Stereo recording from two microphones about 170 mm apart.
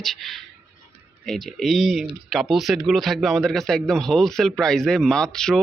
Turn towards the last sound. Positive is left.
turn(degrees=5)  # may be behind; listen again after turning